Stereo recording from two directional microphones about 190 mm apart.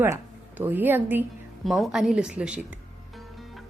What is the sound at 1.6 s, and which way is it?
A woman's voice, centre (ahead or behind).